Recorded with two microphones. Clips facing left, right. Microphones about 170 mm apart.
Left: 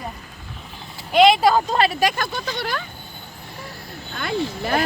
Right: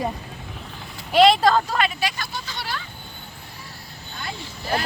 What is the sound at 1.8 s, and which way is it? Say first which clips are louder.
Speech: left 5 dB; 40° left (ahead or behind).